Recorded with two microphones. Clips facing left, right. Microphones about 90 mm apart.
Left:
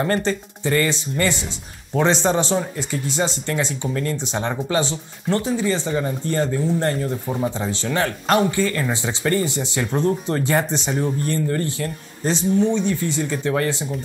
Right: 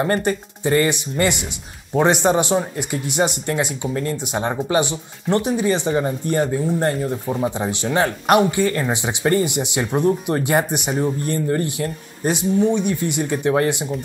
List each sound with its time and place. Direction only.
0.0 s speech: 15° right (ahead or behind)